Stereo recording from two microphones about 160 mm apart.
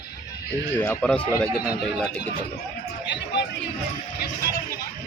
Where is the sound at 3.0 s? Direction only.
90° left.